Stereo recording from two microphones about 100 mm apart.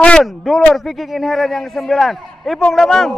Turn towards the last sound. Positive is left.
turn(degrees=5)  # may be behind; listen again after turning